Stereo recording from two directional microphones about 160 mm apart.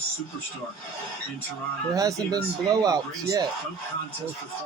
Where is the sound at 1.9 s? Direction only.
25° right (ahead or behind).